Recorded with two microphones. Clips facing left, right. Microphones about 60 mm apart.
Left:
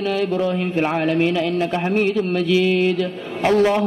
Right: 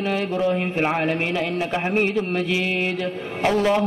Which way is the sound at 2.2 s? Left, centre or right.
Right.